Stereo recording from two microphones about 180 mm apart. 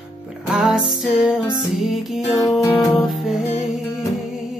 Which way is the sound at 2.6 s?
20° left (ahead or behind).